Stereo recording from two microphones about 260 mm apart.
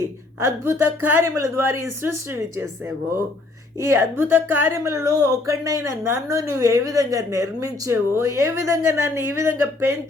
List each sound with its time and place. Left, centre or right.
0.0 s speech: centre
3.8 s speech: centre